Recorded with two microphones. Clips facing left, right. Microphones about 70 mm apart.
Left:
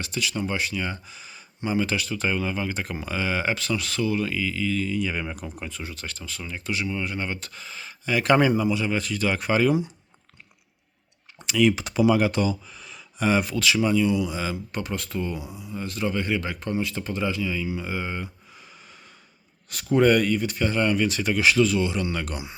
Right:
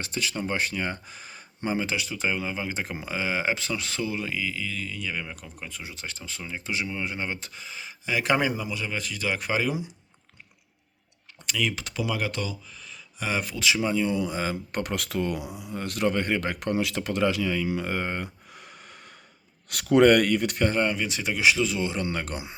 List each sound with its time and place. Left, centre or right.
0.0 s speech: right
1.7 s speech: right; by 5.8 s centre
5.8 s speech: centre
7.6 s speech: centre
11.4 s speech: centre
11.7 s speech: centre
12.7 s a sound: centre
13.6 s speech: centre
13.9 s speech: right
20.9 s speech: centre; by 22.5 s right